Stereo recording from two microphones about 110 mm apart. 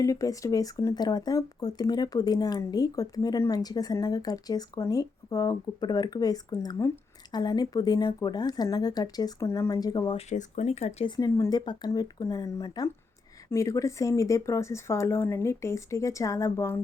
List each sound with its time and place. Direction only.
0.0 s speech: 30° left (ahead or behind)
10.1 s speech: 80° left
11.2 s speech: 35° left (ahead or behind)
11.9 s speech: 30° left (ahead or behind)